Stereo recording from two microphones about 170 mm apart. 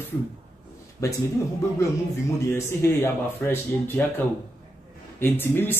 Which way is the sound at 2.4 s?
15° left (ahead or behind).